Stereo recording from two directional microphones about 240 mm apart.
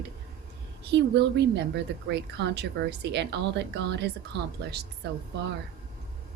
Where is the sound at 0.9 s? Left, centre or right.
Right.